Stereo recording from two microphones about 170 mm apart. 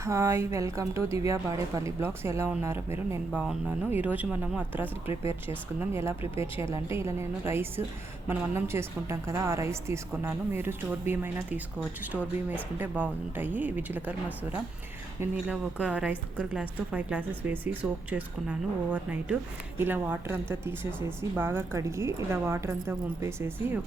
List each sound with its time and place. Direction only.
0.0 s a woman's voice: 15° right (ahead or behind)